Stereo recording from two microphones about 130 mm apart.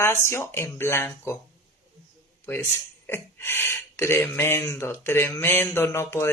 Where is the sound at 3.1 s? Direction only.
15° left (ahead or behind).